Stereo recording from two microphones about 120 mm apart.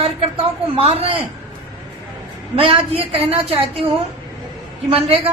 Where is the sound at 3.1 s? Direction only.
55° right (ahead or behind).